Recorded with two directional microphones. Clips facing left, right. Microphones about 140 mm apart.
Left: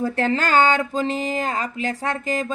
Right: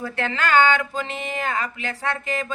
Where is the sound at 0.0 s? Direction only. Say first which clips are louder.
Left 4 dB; 40° left (ahead or behind).